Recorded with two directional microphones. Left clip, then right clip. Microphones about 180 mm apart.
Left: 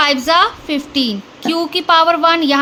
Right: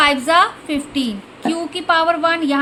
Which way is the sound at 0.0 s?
20° left (ahead or behind).